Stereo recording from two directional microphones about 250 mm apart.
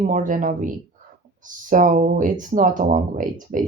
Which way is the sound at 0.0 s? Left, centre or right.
Right.